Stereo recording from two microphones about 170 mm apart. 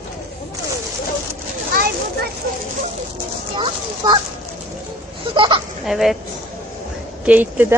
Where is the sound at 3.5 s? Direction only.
30° right (ahead or behind).